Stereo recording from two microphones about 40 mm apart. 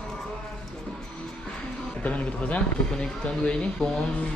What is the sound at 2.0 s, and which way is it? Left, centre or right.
Speech, left.